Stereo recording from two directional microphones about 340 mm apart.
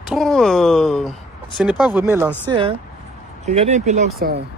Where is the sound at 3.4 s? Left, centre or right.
Centre.